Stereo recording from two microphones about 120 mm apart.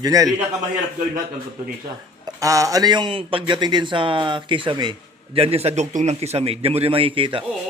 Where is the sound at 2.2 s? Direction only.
30° right (ahead or behind); by 7.4 s 45° right (ahead or behind).